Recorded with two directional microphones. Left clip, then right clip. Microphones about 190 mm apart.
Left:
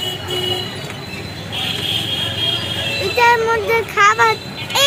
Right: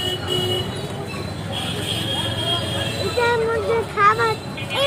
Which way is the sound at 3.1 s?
35° left (ahead or behind).